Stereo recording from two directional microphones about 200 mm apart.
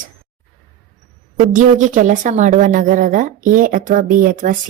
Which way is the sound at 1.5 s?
40° right (ahead or behind).